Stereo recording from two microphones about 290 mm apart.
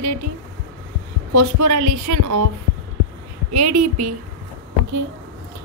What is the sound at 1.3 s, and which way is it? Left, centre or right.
A woman's voice, right.